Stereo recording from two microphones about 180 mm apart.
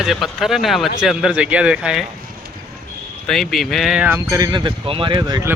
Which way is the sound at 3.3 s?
Centre (ahead or behind).